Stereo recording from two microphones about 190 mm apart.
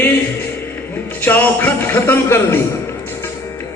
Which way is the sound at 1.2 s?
10° left (ahead or behind).